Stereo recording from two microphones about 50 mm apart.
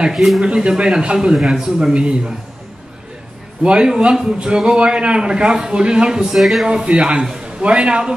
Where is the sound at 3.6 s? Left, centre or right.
Centre.